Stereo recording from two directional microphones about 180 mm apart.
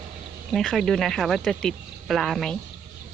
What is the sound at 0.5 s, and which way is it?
Speech, centre (ahead or behind).